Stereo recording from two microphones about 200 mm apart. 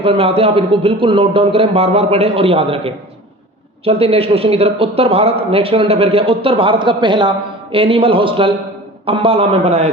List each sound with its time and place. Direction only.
0.0 s a man's voice: 30° right (ahead or behind)